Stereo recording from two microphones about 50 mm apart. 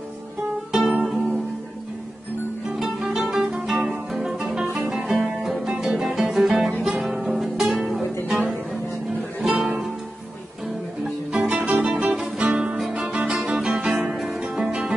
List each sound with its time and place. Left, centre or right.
0.7 s music: centre
2.7 s music: centre
9.4 s music: centre
11.3 s music: right
12.7 s music: centre